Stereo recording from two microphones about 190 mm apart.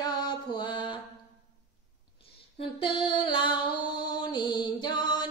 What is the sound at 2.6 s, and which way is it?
Music, 25° left (ahead or behind).